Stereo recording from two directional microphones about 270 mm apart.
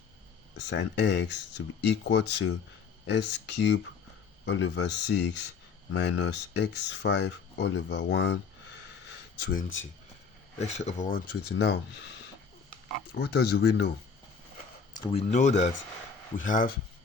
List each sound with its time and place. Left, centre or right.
0.7 s speech: left
10.7 s speech: left
13.1 s speech: left
15.0 s speech: left